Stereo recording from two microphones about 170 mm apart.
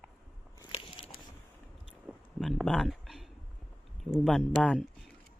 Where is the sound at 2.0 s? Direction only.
Centre (ahead or behind).